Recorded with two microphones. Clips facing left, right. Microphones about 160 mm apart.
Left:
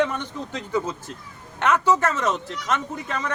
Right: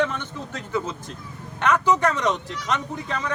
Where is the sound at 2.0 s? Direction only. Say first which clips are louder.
Right 1 dB; 5° left (ahead or behind).